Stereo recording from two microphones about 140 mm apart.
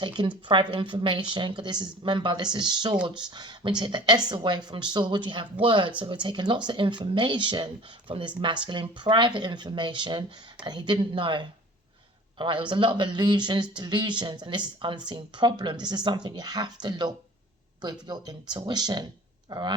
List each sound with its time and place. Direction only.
0.0 s speech: 35° right (ahead or behind)